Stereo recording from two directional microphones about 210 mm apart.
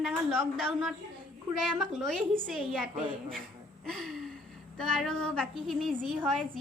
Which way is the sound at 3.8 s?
Centre (ahead or behind).